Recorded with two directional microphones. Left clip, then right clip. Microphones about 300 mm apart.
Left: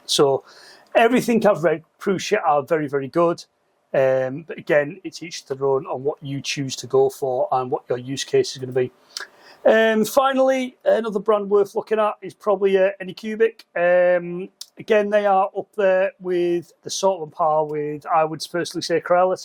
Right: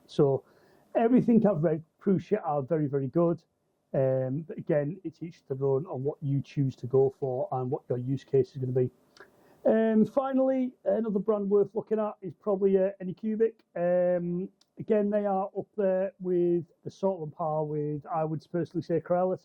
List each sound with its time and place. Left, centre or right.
0.1 s speech: centre
7.2 s speech: left
7.7 s speech: centre
17.2 s speech: centre